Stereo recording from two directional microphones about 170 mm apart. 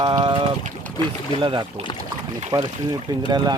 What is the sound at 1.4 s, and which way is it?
Speech, 30° right (ahead or behind).